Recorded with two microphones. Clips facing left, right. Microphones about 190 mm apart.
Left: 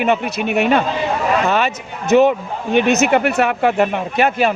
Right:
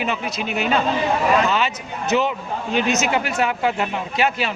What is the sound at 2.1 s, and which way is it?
Speech, 55° left (ahead or behind).